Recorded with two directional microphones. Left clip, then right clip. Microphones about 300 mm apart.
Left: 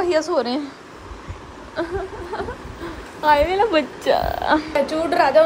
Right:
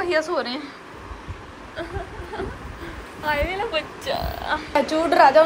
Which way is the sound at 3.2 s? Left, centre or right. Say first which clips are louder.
Left 8 dB; left.